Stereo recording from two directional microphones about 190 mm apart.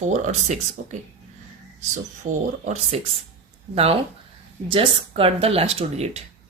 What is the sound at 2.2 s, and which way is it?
Speech, 40° right (ahead or behind).